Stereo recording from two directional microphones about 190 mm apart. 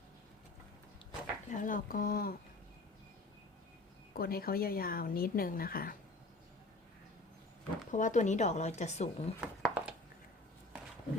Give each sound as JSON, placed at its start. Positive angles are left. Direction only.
{"t": 1.5, "sound": "speech", "side_deg": 40}
{"t": 4.1, "sound": "speech", "side_deg": 55}
{"t": 7.9, "sound": "speech", "side_deg": 40}
{"t": 9.6, "sound": "a sound", "side_deg": -5}